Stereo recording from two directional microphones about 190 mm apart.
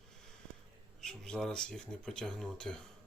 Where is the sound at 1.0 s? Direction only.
5° left (ahead or behind).